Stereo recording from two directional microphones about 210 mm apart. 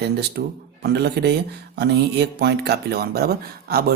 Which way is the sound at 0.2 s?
50° right (ahead or behind).